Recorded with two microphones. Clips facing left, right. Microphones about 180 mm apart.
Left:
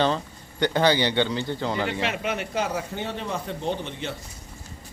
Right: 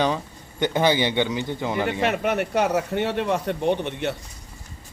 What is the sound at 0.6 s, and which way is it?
Speech, 20° right (ahead or behind).